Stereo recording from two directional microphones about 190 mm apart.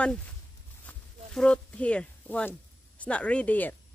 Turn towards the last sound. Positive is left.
turn(degrees=10)  # may be behind; listen again after turning